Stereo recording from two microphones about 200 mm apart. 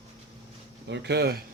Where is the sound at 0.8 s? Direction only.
60° right (ahead or behind).